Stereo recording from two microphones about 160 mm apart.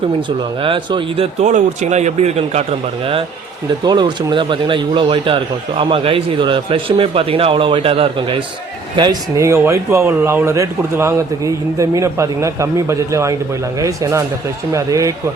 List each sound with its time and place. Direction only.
0.3 s speech: 30° right (ahead or behind)
3.8 s speech: 30° right (ahead or behind)
9.0 s speech: 25° right (ahead or behind)